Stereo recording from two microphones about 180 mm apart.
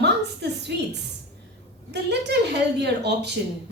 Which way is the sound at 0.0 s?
70° right (ahead or behind).